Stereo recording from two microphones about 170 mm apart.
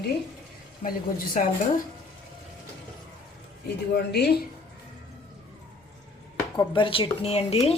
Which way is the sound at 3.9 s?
75° left (ahead or behind).